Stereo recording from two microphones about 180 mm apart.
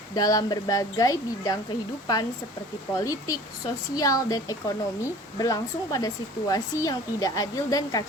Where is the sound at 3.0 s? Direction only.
20° left (ahead or behind).